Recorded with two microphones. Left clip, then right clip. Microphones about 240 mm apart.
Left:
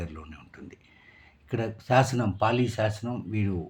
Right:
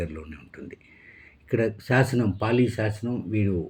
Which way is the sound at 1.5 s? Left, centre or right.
Centre.